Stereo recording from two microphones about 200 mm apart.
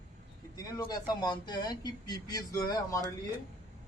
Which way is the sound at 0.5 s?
20° left (ahead or behind).